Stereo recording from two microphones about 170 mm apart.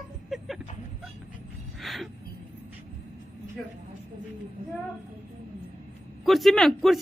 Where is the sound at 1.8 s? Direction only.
Centre (ahead or behind).